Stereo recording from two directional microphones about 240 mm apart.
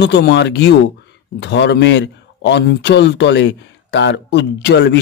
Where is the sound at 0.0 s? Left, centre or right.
Left.